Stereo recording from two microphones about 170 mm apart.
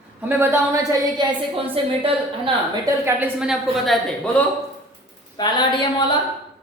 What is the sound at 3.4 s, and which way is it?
Speech, centre (ahead or behind).